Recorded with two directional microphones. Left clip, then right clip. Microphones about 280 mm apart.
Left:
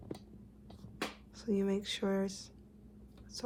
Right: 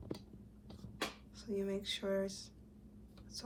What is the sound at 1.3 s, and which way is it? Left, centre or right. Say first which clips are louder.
A woman's voice: left 6 dB; left.